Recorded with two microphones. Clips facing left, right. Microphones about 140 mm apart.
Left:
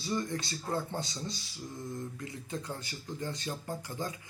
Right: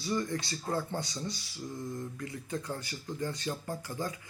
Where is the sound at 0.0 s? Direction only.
20° left (ahead or behind).